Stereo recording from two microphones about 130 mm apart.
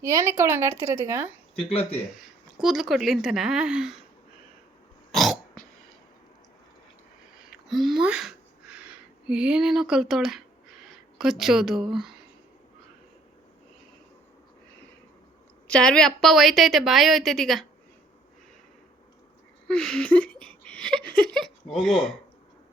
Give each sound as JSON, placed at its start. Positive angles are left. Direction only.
{"t": 0.0, "sound": "a woman's voice", "side_deg": -25}
{"t": 1.5, "sound": "speech", "side_deg": 50}
{"t": 2.2, "sound": "a woman's voice", "side_deg": 0}
{"t": 7.5, "sound": "a sound", "side_deg": 0}
{"t": 15.6, "sound": "a woman's voice", "side_deg": 5}
{"t": 19.6, "sound": "a sound", "side_deg": 5}